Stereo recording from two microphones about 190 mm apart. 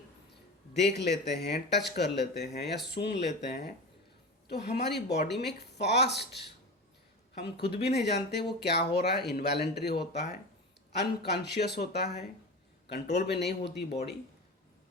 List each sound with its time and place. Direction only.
0.7 s speech: 65° left (ahead or behind)
4.4 s speech: 60° left (ahead or behind)
7.4 s speech: 60° left (ahead or behind)